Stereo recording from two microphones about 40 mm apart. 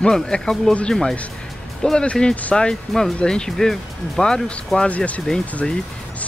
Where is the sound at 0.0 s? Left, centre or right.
Centre.